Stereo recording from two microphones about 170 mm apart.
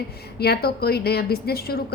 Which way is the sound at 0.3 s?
70° left (ahead or behind).